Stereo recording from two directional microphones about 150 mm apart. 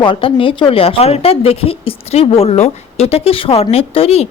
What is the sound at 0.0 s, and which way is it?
A woman's voice, 35° left (ahead or behind).